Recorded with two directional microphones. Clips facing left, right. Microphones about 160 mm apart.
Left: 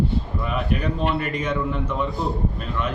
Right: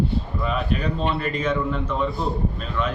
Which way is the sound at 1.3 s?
20° left (ahead or behind).